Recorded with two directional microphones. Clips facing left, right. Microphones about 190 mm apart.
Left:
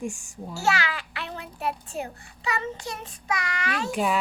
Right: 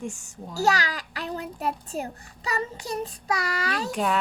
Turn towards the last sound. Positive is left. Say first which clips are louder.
# even
turn(degrees=5)  # may be behind; listen again after turning